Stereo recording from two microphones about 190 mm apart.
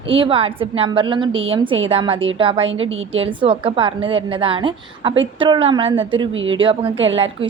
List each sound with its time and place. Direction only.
0.1 s a woman's voice: 30° right (ahead or behind)
6.3 s speech: 90° right
6.6 s a woman's voice: 25° right (ahead or behind)
6.9 s speech: 90° right